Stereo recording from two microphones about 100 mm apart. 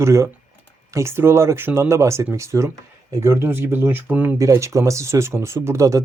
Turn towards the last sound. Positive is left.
turn(degrees=-30)  # may be behind; listen again after turning